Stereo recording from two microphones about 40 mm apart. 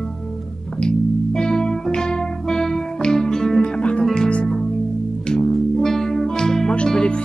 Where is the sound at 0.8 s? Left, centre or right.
Centre.